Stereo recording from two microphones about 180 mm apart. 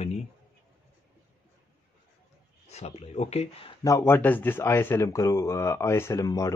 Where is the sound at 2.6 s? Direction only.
35° left (ahead or behind).